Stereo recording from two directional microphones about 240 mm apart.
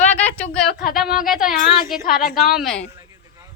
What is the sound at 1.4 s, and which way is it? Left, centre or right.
A woman's voice, left.